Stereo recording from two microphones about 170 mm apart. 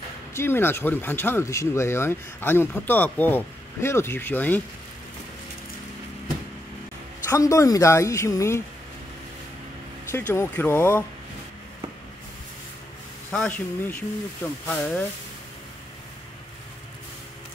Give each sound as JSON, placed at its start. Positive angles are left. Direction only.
{"t": 0.3, "sound": "speech", "side_deg": 15}
{"t": 7.2, "sound": "speech", "side_deg": 20}
{"t": 10.1, "sound": "speech", "side_deg": 15}
{"t": 13.3, "sound": "speech", "side_deg": 10}